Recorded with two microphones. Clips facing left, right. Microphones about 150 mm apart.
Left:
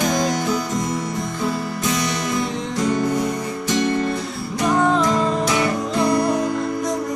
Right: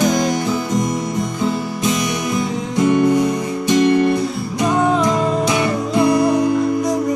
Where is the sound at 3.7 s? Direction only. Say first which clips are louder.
Right 7 dB; 15° right (ahead or behind).